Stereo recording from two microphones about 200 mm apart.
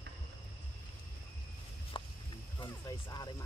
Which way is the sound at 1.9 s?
25° left (ahead or behind).